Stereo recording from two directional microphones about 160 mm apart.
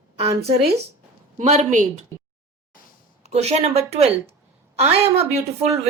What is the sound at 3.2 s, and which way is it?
Speech, 40° right (ahead or behind).